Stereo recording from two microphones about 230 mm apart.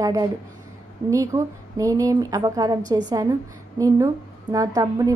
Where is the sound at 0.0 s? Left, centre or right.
Centre.